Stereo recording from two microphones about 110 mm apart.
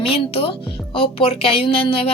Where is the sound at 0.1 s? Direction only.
60° left (ahead or behind).